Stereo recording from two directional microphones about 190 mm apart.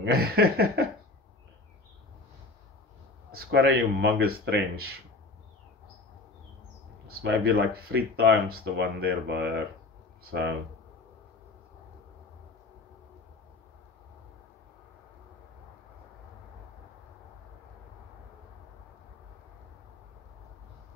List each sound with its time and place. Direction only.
0.0 s speech: 55° right (ahead or behind)
3.3 s speech: 55° right (ahead or behind)
7.2 s speech: 60° right (ahead or behind)